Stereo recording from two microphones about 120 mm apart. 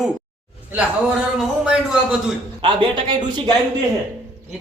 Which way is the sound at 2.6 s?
45° right (ahead or behind).